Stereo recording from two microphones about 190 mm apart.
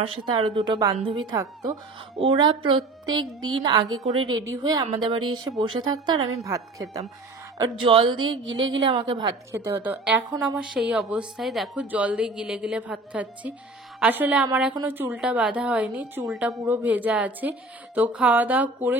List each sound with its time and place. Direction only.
0.0 s a woman's voice: 25° right (ahead or behind)
9.7 s a woman's voice: 10° right (ahead or behind)
10.6 s a woman's voice: 5° right (ahead or behind)